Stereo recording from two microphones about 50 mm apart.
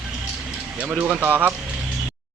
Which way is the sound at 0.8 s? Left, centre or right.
Right.